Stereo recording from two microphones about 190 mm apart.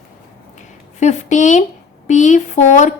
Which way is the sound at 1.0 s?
40° left (ahead or behind).